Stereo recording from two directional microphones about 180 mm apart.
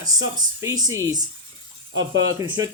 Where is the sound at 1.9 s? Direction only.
90° right.